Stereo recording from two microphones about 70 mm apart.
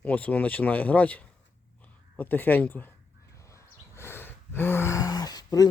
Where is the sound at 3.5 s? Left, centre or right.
Left.